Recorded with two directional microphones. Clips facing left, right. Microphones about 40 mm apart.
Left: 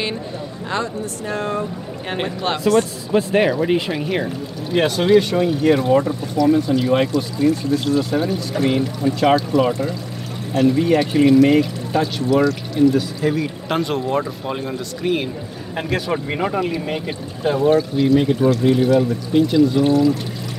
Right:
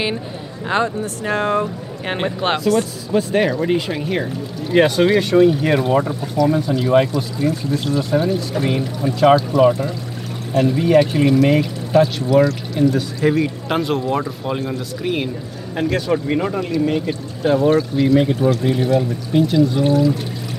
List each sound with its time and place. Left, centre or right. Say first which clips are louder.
0.7 s speech: right 5 dB; right
1.2 s speech: right 5 dB; right
2.7 s speech: left 1 dB; centre
17.5 s speech: right 1 dB; centre